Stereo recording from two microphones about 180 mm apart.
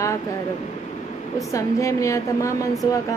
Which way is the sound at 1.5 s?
15° left (ahead or behind).